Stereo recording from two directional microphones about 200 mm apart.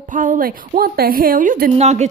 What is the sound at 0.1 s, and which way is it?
A woman's voice, 40° right (ahead or behind).